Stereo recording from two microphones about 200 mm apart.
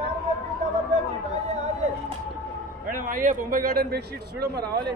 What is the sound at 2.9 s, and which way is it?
A man's voice, 45° right (ahead or behind).